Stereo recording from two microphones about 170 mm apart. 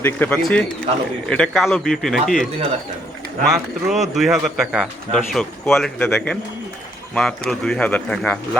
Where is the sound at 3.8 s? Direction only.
Centre (ahead or behind).